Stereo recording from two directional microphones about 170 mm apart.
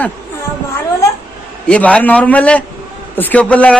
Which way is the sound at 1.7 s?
5° left (ahead or behind).